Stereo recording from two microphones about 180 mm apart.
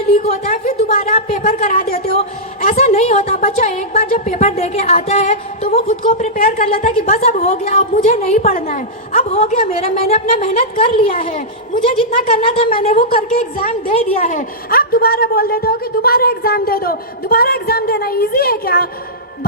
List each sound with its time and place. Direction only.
0.1 s a woman's voice: 35° left (ahead or behind)
1.7 s a woman's voice: 55° left (ahead or behind)
2.1 s a woman's voice: 35° left (ahead or behind)
12.7 s a woman's voice: 50° left (ahead or behind)
13.3 s a woman's voice: 35° left (ahead or behind); by 18.9 s 55° left (ahead or behind)